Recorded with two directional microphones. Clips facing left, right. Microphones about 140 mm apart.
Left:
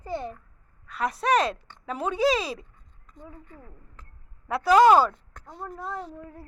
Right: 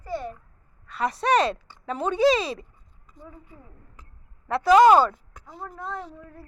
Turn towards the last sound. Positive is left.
turn(degrees=-5)  # may be behind; listen again after turning